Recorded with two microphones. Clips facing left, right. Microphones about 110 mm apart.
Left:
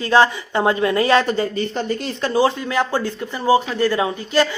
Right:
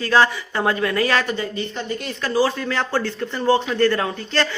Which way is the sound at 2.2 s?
20° left (ahead or behind).